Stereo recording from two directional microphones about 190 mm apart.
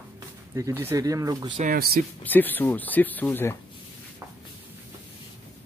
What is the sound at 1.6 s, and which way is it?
Speech, 45° right (ahead or behind).